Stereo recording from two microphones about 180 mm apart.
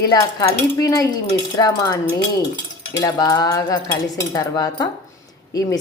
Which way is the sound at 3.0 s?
20° left (ahead or behind).